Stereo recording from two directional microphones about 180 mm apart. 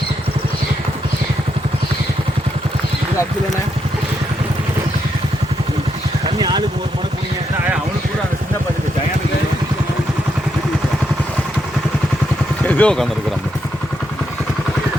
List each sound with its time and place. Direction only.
6.2 s vehicle: 25° right (ahead or behind)
12.6 s vehicle: 10° left (ahead or behind)